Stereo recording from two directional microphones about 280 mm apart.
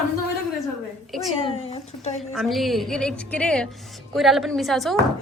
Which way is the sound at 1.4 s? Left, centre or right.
Left.